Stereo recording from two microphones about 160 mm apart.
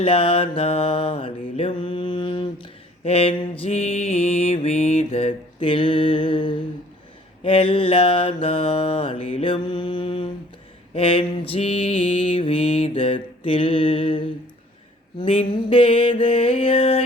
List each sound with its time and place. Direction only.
0.0 s mantra: 35° left (ahead or behind)